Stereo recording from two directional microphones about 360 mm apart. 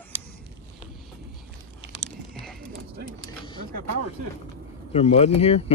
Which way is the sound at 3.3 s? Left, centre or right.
Centre.